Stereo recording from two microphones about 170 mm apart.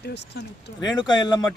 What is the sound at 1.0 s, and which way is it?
Speech, 25° left (ahead or behind).